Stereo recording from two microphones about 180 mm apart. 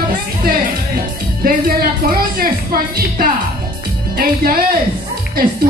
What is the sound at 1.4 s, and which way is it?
A woman's voice, 55° right (ahead or behind).